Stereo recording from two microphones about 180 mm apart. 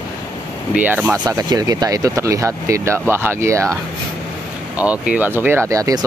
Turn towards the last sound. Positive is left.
turn(degrees=-20)  # may be behind; listen again after turning